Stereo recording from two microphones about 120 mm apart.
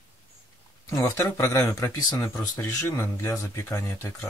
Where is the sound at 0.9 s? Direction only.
25° left (ahead or behind).